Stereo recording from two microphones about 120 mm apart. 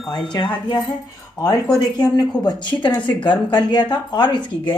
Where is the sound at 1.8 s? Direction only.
35° left (ahead or behind).